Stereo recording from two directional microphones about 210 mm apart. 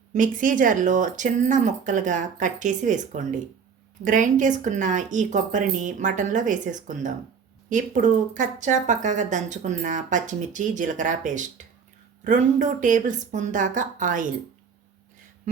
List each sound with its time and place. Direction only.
0.1 s speech: 40° right (ahead or behind)